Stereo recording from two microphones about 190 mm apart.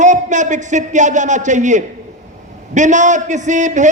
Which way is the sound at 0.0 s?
40° right (ahead or behind).